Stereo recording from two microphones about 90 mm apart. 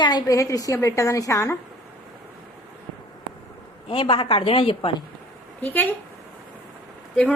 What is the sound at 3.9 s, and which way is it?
A woman's voice, 70° left (ahead or behind).